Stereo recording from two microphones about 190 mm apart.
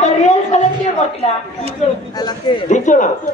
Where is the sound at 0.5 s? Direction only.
40° left (ahead or behind).